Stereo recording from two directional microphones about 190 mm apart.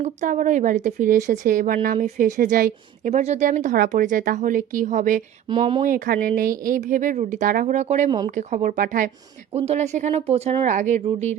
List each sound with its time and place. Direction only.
0.0 s a woman's voice: 40° right (ahead or behind)
5.5 s speech: 30° right (ahead or behind)
5.8 s a woman's voice: 50° right (ahead or behind)
9.6 s speech: 35° right (ahead or behind)